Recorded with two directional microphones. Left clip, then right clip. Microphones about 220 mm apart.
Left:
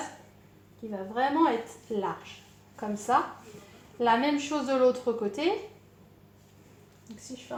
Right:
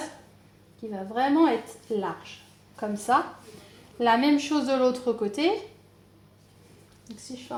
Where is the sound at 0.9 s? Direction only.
30° right (ahead or behind).